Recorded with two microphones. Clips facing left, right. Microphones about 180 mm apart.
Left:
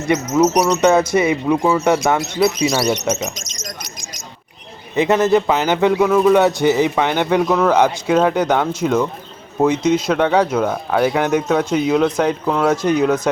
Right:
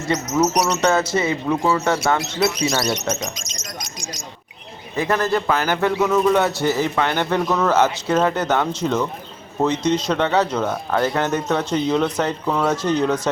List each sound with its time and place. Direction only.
0.1 s speech: 15° left (ahead or behind)
4.9 s speech: 20° left (ahead or behind)